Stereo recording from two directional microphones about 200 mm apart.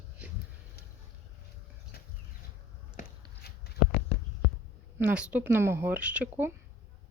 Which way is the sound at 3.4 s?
55° left (ahead or behind).